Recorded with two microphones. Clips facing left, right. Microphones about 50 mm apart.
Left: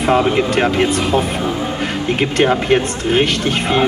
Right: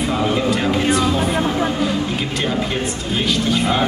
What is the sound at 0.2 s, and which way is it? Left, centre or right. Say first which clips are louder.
Speech: left 3 dB; left.